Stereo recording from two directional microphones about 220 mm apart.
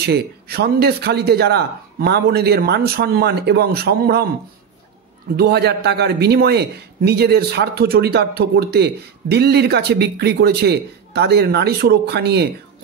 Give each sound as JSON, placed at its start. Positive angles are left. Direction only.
{"t": 0.0, "sound": "a man's voice", "side_deg": -45}
{"t": 5.3, "sound": "a man's voice", "side_deg": -50}